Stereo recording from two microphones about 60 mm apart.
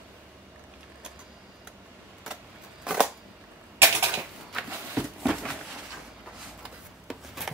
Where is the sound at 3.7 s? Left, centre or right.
Right.